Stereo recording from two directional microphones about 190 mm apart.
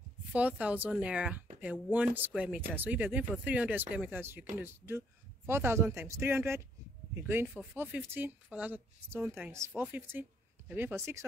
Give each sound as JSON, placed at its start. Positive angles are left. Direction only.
{"t": 0.3, "sound": "speech", "side_deg": -5}